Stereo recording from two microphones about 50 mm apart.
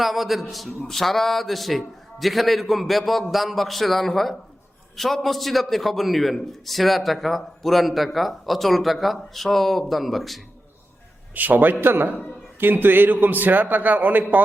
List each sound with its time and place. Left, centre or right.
0.0 s a man's voice: centre
11.3 s a man's voice: right